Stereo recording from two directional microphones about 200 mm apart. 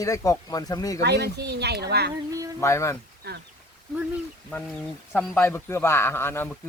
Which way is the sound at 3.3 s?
55° right (ahead or behind).